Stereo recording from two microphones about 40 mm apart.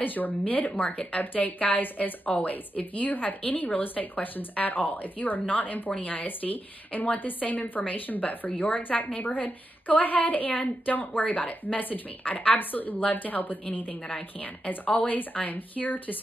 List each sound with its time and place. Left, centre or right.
0.0 s a woman's voice: left
1.2 s speech: left
14.1 s a woman's voice: left